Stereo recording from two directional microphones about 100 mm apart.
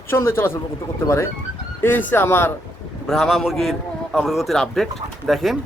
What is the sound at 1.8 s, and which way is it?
Speech, 20° left (ahead or behind).